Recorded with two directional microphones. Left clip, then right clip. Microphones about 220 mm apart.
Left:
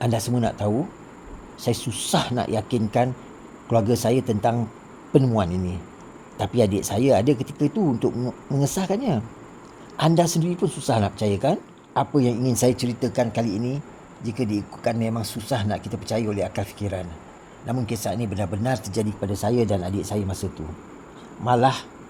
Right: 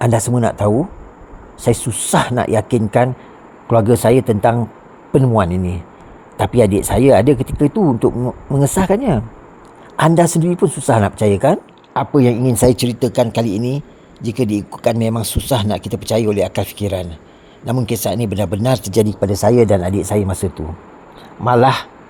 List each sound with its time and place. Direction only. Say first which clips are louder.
0.0 s speech: right 8 dB; 25° right (ahead or behind)
12.7 s speech: right 8 dB; 35° right (ahead or behind)